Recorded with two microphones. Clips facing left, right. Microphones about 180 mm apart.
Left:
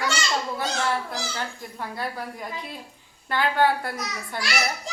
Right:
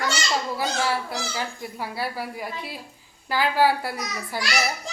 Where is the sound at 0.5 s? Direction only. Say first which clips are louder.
Right 1 dB; 5° right (ahead or behind).